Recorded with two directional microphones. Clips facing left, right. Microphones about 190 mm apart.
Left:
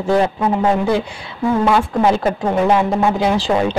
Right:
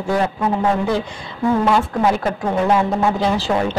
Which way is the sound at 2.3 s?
15° left (ahead or behind).